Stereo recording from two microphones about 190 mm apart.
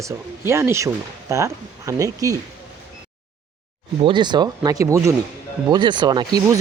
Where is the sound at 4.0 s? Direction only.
25° right (ahead or behind).